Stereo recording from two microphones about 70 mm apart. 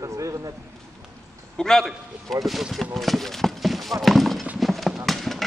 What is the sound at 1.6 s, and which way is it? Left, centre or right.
A man's voice, centre.